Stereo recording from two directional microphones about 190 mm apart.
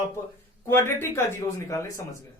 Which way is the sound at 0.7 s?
10° left (ahead or behind).